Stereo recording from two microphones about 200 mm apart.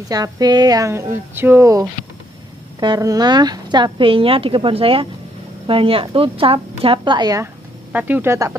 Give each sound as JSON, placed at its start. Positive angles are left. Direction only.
{"t": 0.1, "sound": "speech", "side_deg": -20}
{"t": 7.9, "sound": "speech", "side_deg": -10}